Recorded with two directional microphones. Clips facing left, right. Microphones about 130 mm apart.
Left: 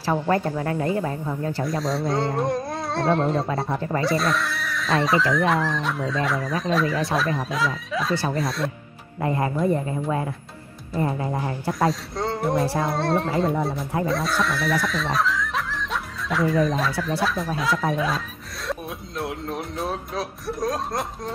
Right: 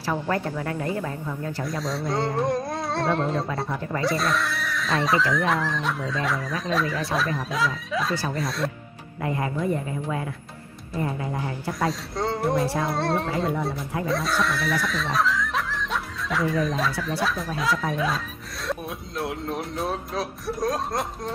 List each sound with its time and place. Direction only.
0.0 s speech: 30° left (ahead or behind)
1.6 s speech: centre (ahead or behind)
3.4 s speech: 30° left (ahead or behind)
4.0 s speech: centre (ahead or behind)
11.0 s speech: 35° left (ahead or behind)
11.8 s speech: centre (ahead or behind)